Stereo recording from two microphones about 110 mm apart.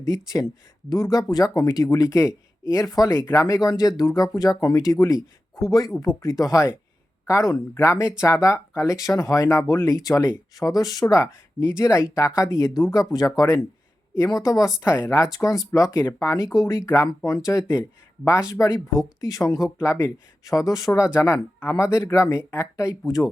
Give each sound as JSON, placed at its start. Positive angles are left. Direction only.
{"t": 0.0, "sound": "speech", "side_deg": 30}
{"t": 3.4, "sound": "speech", "side_deg": 35}